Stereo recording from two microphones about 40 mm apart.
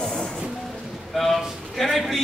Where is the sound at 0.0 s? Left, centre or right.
Left.